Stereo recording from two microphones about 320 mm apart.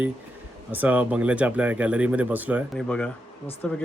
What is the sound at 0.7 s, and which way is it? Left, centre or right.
Speech, centre.